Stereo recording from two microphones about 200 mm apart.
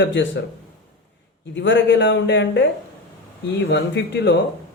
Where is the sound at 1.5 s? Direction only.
65° left (ahead or behind).